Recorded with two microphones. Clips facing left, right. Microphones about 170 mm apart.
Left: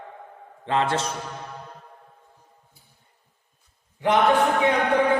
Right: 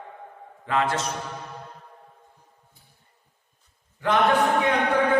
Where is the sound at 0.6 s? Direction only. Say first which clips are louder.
Left 1 dB; 30° left (ahead or behind).